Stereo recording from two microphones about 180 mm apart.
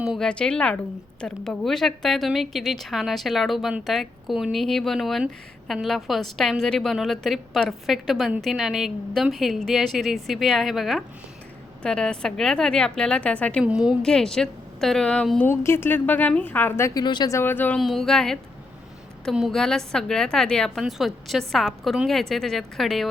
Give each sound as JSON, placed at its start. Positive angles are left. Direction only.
{"t": 0.0, "sound": "a woman's voice", "side_deg": 0}
{"t": 13.7, "sound": "a woman's voice", "side_deg": -5}